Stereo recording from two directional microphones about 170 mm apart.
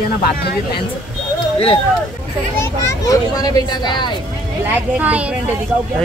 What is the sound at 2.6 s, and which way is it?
A child's voice, 20° left (ahead or behind).